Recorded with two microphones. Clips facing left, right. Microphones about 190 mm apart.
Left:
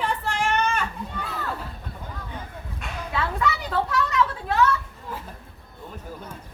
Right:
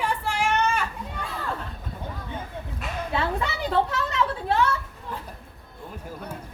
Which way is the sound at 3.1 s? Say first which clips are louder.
Left 2 dB; 30° right (ahead or behind).